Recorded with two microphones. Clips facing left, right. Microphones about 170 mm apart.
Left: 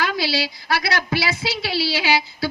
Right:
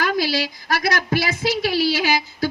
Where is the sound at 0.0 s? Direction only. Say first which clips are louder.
Right 2 dB; 45° right (ahead or behind).